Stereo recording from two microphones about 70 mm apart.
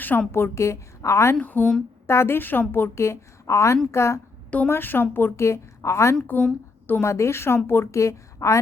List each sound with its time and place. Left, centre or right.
0.0 s a woman's voice: left
1.4 s speech: left
2.0 s a woman's voice: left
4.7 s a woman's voice: left
6.2 s a woman's voice: left
7.0 s a woman's voice: left